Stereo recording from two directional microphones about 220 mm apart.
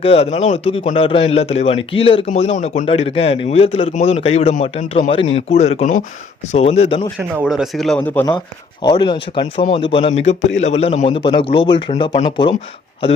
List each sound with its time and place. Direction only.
0.0 s speech: 25° left (ahead or behind)
7.4 s a man's voice: centre (ahead or behind)
8.8 s speech: 20° left (ahead or behind)